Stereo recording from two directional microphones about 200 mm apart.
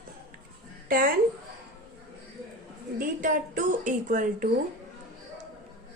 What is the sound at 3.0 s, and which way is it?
A woman's voice, 40° right (ahead or behind).